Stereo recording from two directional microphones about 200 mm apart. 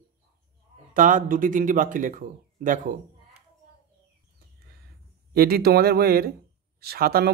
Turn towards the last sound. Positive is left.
turn(degrees=-50)  # may be behind; listen again after turning